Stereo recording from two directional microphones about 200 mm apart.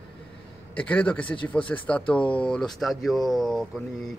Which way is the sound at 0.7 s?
5° left (ahead or behind).